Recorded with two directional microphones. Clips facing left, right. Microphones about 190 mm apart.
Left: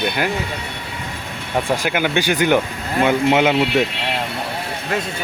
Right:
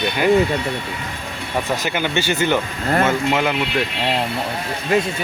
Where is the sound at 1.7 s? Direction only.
10° left (ahead or behind).